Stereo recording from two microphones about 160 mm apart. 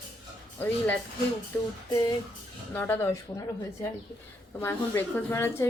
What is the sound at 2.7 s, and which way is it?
Speech, 15° left (ahead or behind).